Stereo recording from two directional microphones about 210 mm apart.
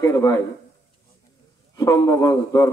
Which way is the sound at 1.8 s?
15° left (ahead or behind).